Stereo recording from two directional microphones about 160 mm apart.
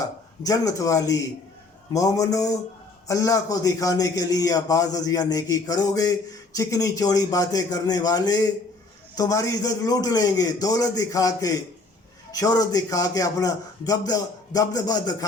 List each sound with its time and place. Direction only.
0.0 s a man's voice: 20° left (ahead or behind)